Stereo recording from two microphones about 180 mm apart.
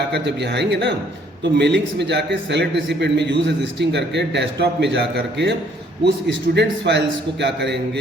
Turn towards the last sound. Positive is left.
turn(degrees=-70)  # may be behind; listen again after turning